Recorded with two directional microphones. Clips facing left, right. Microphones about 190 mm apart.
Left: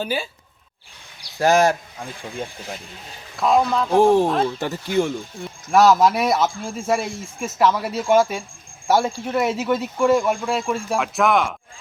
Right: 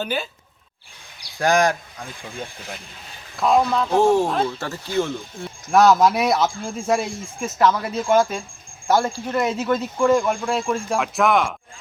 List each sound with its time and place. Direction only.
0.0 s speech: 5° left (ahead or behind)
1.4 s speech: 5° left (ahead or behind)
3.3 s speech: centre (ahead or behind)
4.0 s speech: 15° left (ahead or behind)
5.7 s speech: centre (ahead or behind)